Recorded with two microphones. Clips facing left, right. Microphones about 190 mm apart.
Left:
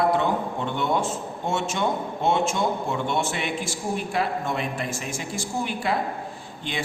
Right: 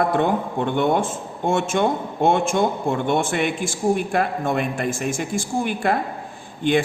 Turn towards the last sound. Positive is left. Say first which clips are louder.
# right 11 dB
turn(degrees=-55)  # may be behind; listen again after turning